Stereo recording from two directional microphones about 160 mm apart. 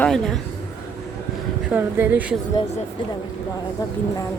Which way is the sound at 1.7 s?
15° right (ahead or behind).